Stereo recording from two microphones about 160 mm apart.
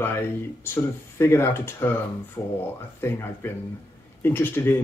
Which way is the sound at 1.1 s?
15° left (ahead or behind).